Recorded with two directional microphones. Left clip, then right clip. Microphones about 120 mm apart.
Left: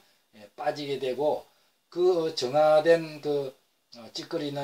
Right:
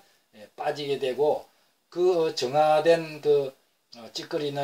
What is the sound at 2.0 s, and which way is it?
Speech, 5° left (ahead or behind).